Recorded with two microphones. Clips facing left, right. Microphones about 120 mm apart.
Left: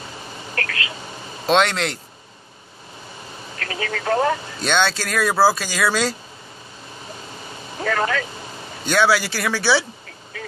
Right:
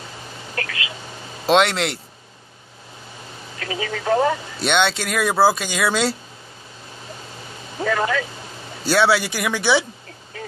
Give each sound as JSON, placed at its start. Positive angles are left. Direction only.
{"t": 0.6, "sound": "speech", "side_deg": -15}
{"t": 1.4, "sound": "speech", "side_deg": -25}
{"t": 3.5, "sound": "speech", "side_deg": -10}
{"t": 4.6, "sound": "speech", "side_deg": -20}
{"t": 7.8, "sound": "speech", "side_deg": -10}
{"t": 8.8, "sound": "speech", "side_deg": -25}
{"t": 10.3, "sound": "radio", "side_deg": -35}